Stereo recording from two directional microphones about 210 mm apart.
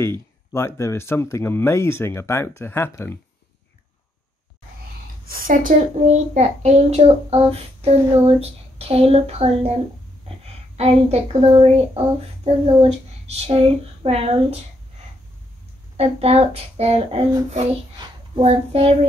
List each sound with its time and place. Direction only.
0.0 s speech: 10° left (ahead or behind)
5.2 s a child's voice: 45° right (ahead or behind)
16.0 s a child's voice: 30° right (ahead or behind)
17.9 s a sound: 20° right (ahead or behind)
18.4 s a child's voice: 25° right (ahead or behind)